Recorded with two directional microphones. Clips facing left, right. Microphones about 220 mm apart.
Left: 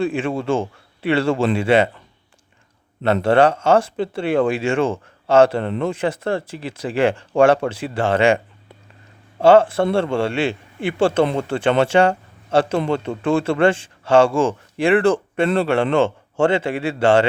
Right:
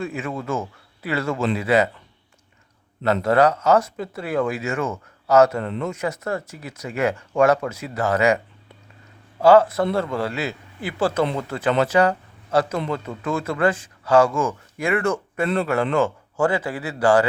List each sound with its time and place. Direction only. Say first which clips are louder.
0.0 s speech: left 7 dB; 30° left (ahead or behind)
3.0 s speech: left 3 dB; 30° left (ahead or behind)
9.4 s speech: left 2 dB; 25° left (ahead or behind)